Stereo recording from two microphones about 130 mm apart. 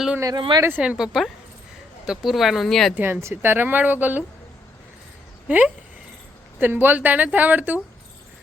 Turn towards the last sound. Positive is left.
turn(degrees=-15)  # may be behind; listen again after turning